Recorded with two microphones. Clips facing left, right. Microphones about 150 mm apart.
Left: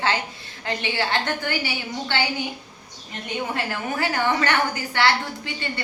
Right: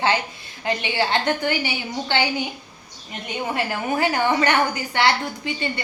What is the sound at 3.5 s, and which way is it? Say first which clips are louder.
A woman's voice: right 7 dB; 15° right (ahead or behind).